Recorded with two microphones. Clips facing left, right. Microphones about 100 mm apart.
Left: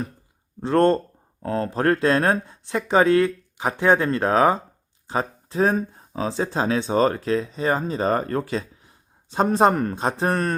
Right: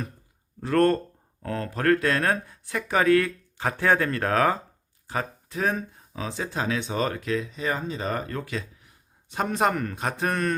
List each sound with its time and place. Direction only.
0.6 s speech: 25° left (ahead or behind)